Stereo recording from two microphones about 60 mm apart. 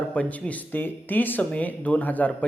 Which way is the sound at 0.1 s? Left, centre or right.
Left.